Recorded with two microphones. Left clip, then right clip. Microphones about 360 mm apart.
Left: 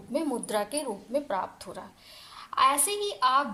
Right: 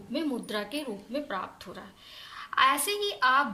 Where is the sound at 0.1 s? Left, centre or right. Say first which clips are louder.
Left 3 dB; centre.